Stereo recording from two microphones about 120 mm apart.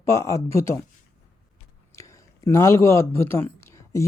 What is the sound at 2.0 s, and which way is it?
A man's voice, 25° left (ahead or behind).